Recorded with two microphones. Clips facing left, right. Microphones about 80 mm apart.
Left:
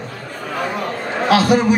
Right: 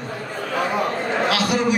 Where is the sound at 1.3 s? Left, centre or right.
Left.